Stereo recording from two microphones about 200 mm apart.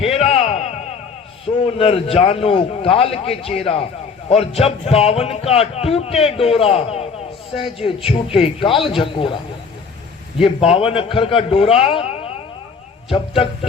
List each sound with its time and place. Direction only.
0.0 s a sound: 30° left (ahead or behind)
1.5 s speech: 30° left (ahead or behind)
10.4 s speech: 30° left (ahead or behind)